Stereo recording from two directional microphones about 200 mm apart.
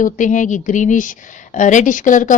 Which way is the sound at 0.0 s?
40° left (ahead or behind).